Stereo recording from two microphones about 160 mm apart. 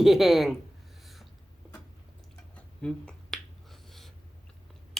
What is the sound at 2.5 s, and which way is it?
Finger snapping, 5° left (ahead or behind).